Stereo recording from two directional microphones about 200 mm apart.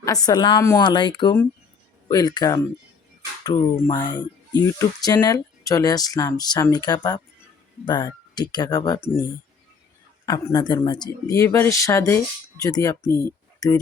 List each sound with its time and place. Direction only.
0.0 s speech: 15° left (ahead or behind)
10.2 s speech: 20° left (ahead or behind)